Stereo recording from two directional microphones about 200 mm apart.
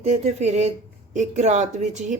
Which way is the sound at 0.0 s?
35° right (ahead or behind).